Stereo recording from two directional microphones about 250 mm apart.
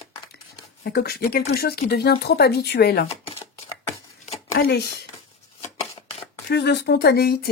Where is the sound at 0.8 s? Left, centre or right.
Left.